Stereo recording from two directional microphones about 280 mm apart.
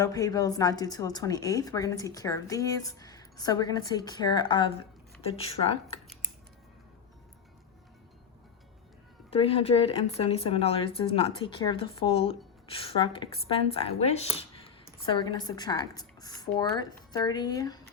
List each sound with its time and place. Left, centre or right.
0.0 s a woman's voice: centre
9.3 s speech: left
14.3 s computer keyboard: centre
15.0 s a woman's voice: centre